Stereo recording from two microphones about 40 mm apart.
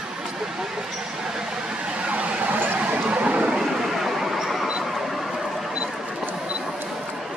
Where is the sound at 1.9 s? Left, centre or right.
Right.